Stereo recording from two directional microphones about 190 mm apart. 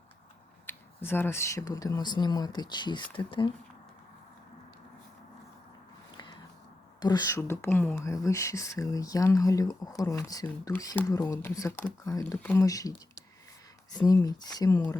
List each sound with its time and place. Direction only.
0.7 s speech: 10° left (ahead or behind); by 3.5 s 25° left (ahead or behind)
6.1 s biting: 20° left (ahead or behind)
7.0 s speech: 20° left (ahead or behind)